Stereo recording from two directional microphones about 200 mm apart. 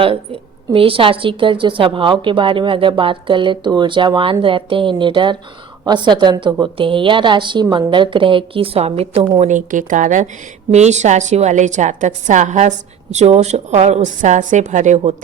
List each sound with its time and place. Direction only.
0.7 s a woman's voice: 25° right (ahead or behind)